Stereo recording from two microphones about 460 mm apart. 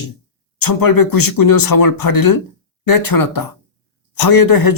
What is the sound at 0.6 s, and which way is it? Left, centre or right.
Speech, left.